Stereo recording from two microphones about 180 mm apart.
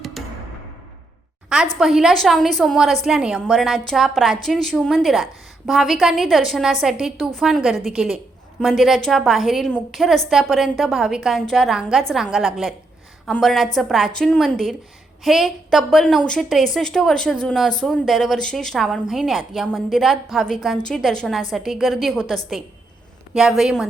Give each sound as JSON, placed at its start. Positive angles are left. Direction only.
{"t": 0.2, "sound": "music", "side_deg": 0}
{"t": 1.5, "sound": "a woman's voice", "side_deg": -5}